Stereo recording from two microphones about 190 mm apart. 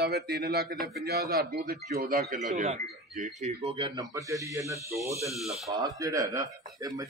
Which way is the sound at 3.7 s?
25° right (ahead or behind).